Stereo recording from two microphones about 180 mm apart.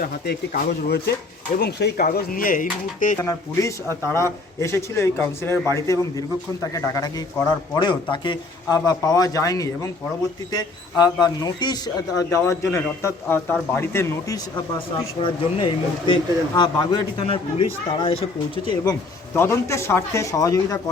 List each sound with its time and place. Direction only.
0.0 s speech: 55° left (ahead or behind)
3.2 s a man's voice: 15° left (ahead or behind)
15.2 s a man's voice: 30° left (ahead or behind)
19.3 s a man's voice: 15° left (ahead or behind)